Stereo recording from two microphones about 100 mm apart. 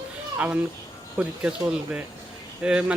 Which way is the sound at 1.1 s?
10° right (ahead or behind).